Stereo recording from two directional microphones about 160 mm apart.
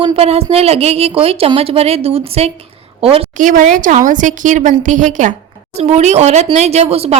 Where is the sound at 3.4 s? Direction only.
55° right (ahead or behind).